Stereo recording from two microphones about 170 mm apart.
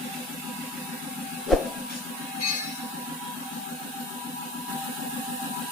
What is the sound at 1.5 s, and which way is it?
Music, centre (ahead or behind).